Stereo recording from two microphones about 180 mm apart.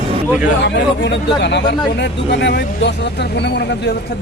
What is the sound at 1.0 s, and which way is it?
Speech, 75° left (ahead or behind).